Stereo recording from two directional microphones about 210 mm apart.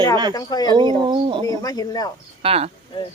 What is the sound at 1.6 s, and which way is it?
Speech, 20° left (ahead or behind).